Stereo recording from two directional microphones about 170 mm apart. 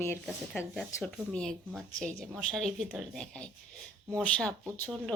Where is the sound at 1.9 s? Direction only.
45° right (ahead or behind).